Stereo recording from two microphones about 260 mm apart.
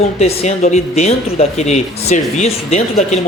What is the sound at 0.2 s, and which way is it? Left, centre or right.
Speech, left.